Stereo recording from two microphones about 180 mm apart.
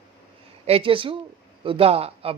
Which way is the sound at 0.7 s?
30° right (ahead or behind).